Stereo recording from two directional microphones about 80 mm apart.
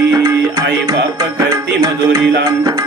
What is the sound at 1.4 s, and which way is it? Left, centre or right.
Music, right.